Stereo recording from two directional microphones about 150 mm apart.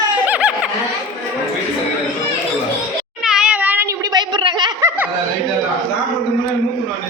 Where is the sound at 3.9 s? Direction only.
25° right (ahead or behind).